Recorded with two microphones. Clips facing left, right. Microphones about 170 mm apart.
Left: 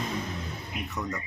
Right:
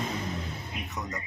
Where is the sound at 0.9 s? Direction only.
20° right (ahead or behind).